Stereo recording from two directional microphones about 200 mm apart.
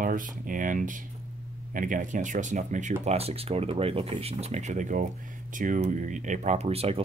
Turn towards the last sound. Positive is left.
turn(degrees=-30)  # may be behind; listen again after turning